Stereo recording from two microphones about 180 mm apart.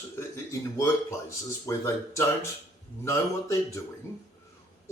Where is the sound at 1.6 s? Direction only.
15° left (ahead or behind).